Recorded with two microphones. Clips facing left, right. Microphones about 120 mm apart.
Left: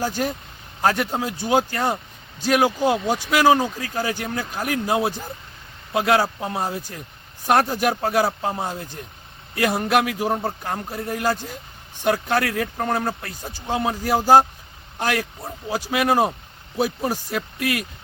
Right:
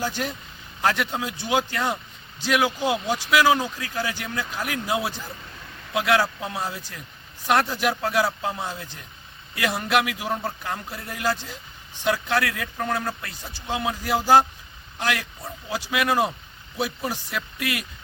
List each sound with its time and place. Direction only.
0.0 s speech: 45° left (ahead or behind)